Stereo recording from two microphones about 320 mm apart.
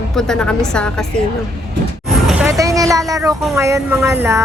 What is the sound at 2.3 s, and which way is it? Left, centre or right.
Speech, centre.